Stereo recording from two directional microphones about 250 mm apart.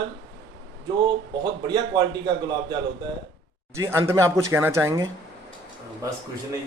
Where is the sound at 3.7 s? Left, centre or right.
Centre.